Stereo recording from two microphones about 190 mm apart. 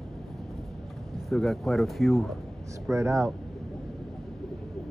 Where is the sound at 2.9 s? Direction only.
15° right (ahead or behind).